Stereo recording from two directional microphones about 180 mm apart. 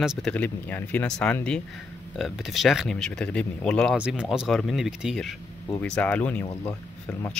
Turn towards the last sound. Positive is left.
turn(degrees=10)  # may be behind; listen again after turning